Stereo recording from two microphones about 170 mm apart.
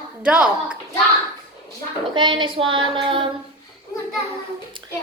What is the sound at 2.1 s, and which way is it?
Speech, 30° right (ahead or behind).